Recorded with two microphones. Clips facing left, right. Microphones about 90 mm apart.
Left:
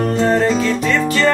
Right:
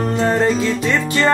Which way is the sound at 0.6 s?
20° right (ahead or behind).